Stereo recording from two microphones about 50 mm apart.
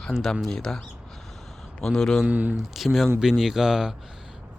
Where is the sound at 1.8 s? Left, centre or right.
Centre.